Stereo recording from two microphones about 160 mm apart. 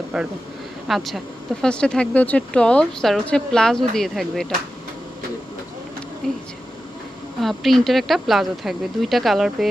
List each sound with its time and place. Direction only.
0.1 s speech: 5° right (ahead or behind)
6.2 s speech: 5° left (ahead or behind)
7.4 s speech: centre (ahead or behind)